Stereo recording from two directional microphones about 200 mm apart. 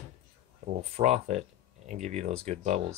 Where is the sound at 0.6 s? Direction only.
35° right (ahead or behind).